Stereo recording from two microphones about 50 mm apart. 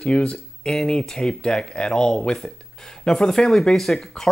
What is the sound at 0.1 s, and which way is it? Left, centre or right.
Speech, left.